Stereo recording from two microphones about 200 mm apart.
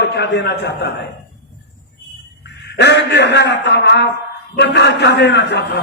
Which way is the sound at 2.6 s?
55° left (ahead or behind).